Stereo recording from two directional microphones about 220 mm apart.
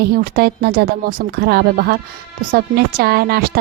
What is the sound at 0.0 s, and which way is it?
A woman's voice, 45° right (ahead or behind).